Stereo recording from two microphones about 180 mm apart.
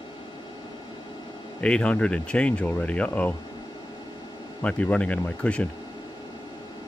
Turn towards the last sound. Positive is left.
turn(degrees=5)  # may be behind; listen again after turning